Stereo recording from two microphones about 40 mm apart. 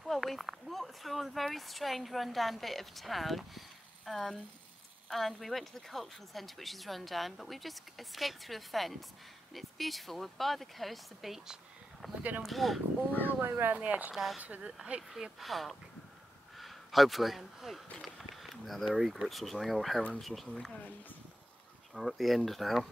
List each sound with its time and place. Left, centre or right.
0.0 s speech: centre
12.2 s speech: right
12.4 s speech: centre
13.4 s speech: right
13.7 s speech: right
14.1 s speech: centre
14.6 s speech: right
15.3 s speech: centre
21.9 s speech: centre